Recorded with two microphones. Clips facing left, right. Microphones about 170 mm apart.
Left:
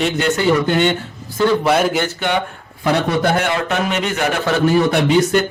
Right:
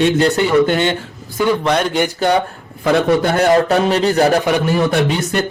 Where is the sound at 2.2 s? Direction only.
35° right (ahead or behind).